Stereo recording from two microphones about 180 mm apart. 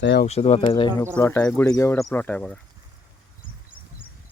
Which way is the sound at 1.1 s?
10° left (ahead or behind).